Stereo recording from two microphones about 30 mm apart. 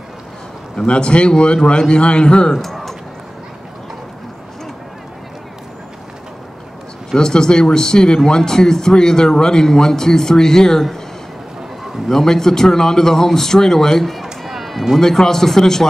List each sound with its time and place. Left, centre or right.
0.8 s a man's voice: left
2.5 s a sound: centre
7.2 s a man's voice: left
12.1 s a man's voice: centre
14.0 s run: centre
15.0 s a man's voice: centre